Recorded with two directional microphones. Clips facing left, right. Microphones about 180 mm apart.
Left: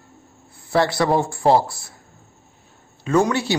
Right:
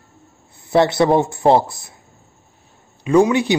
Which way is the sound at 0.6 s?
20° right (ahead or behind).